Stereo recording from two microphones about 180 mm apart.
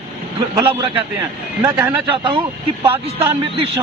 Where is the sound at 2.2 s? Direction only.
30° right (ahead or behind).